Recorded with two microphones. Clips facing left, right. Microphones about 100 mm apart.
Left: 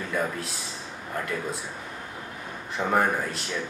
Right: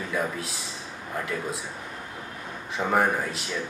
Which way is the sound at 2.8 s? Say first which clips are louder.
Even; centre (ahead or behind).